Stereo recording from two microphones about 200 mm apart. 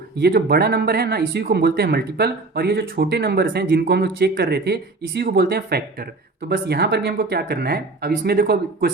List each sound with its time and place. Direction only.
0.2 s speech: 50° right (ahead or behind)